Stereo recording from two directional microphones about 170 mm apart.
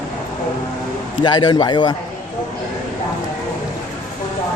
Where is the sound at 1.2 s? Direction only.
25° left (ahead or behind).